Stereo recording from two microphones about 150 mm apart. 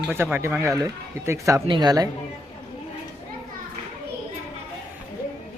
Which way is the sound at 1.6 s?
30° right (ahead or behind).